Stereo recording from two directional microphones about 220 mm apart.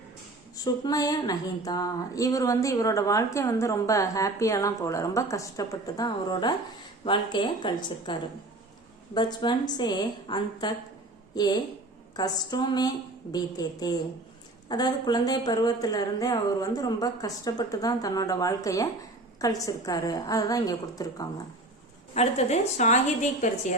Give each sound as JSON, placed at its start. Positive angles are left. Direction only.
{"t": 0.5, "sound": "a woman's voice", "side_deg": 15}
{"t": 22.1, "sound": "a woman's voice", "side_deg": 30}